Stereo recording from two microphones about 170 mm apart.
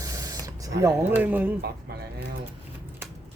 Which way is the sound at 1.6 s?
70° right (ahead or behind).